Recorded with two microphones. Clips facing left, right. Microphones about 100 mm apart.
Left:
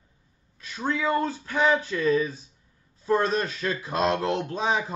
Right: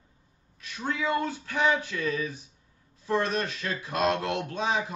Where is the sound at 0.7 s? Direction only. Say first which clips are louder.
Left 3 dB; 35° left (ahead or behind).